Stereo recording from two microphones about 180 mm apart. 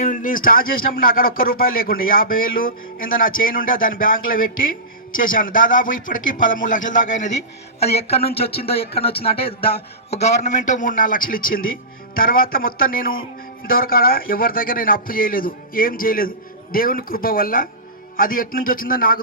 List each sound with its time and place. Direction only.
0.0 s a man's voice: 45° left (ahead or behind)